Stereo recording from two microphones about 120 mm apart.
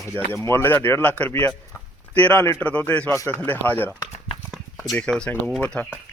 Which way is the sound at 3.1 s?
20° left (ahead or behind).